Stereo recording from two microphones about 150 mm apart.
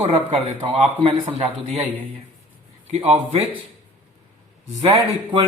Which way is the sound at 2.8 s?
45° right (ahead or behind).